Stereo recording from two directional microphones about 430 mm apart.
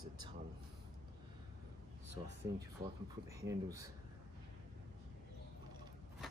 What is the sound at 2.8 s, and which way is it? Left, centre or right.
Speech, centre.